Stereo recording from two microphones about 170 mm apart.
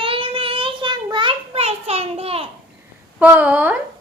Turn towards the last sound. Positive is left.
turn(degrees=-10)  # may be behind; listen again after turning